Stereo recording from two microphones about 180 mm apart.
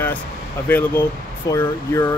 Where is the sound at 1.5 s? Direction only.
15° left (ahead or behind).